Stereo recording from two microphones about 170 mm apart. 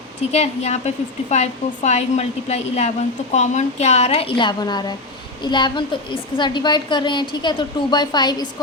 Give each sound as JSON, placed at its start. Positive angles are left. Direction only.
{"t": 0.2, "sound": "a woman's voice", "side_deg": 40}